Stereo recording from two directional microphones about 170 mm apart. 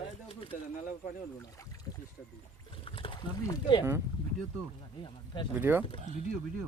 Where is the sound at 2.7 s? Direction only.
30° left (ahead or behind).